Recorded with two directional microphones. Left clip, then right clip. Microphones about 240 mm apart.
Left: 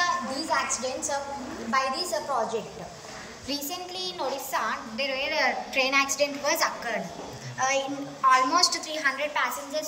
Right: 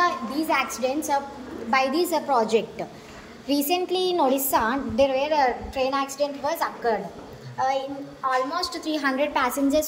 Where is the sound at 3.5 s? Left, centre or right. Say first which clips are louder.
Right 10 dB; right.